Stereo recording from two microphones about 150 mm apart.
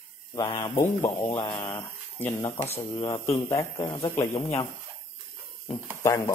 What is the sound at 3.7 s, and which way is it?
Speech, 35° left (ahead or behind).